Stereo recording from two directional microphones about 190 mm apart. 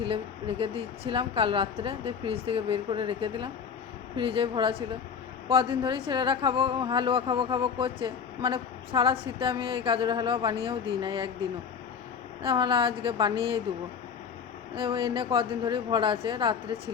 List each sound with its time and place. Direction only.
0.0 s a woman's voice: 30° right (ahead or behind)
14.8 s a woman's voice: 25° right (ahead or behind)